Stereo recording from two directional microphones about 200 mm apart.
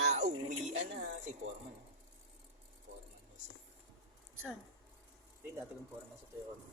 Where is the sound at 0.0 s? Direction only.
35° right (ahead or behind).